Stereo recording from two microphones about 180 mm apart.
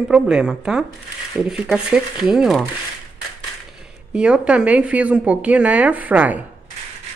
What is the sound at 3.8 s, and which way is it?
Speech, 5° right (ahead or behind).